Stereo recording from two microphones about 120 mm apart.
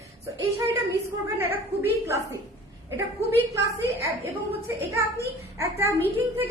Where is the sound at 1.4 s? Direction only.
20° right (ahead or behind).